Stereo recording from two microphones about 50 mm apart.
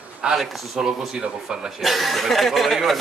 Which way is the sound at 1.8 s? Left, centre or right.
Centre.